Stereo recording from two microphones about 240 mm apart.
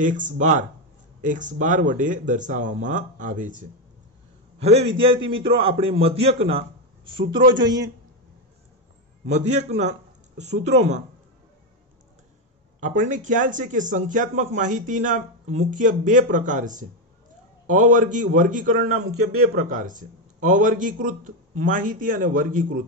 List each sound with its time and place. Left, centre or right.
0.0 s speech: right
4.6 s a man's voice: right
9.2 s speech: right
12.8 s speech: right